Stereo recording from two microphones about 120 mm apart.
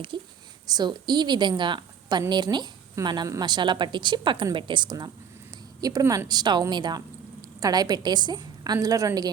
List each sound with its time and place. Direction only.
0.1 s a woman's voice: 45° right (ahead or behind)